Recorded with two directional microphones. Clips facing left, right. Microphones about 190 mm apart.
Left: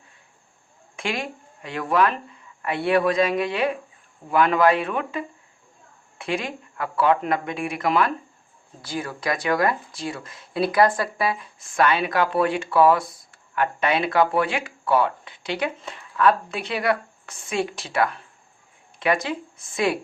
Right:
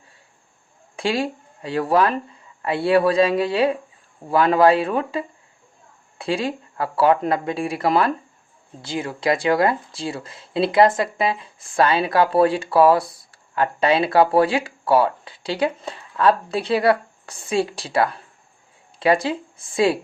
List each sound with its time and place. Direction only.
0.9 s speech: 35° right (ahead or behind)